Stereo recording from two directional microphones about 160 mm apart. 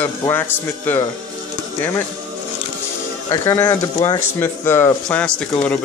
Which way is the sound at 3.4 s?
15° left (ahead or behind).